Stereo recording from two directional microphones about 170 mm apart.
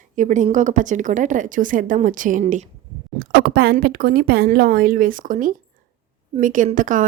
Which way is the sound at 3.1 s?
65° right (ahead or behind).